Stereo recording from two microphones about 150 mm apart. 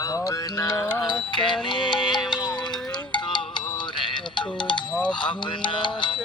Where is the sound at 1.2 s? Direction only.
30° left (ahead or behind).